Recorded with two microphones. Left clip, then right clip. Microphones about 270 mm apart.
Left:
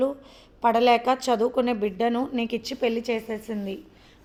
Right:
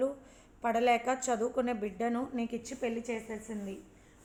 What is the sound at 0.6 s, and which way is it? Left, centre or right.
A woman's voice, left.